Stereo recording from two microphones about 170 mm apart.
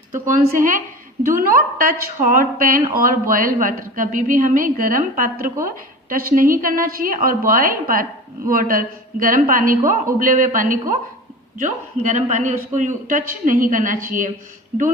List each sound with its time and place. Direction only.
0.3 s a man's voice: 50° right (ahead or behind)